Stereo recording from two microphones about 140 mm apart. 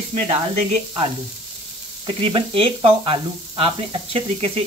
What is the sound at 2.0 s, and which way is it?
Speech, 40° right (ahead or behind).